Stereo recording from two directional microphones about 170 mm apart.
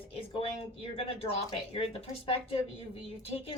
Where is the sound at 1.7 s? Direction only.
35° left (ahead or behind).